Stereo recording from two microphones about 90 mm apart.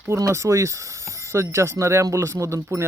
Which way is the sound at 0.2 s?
35° right (ahead or behind).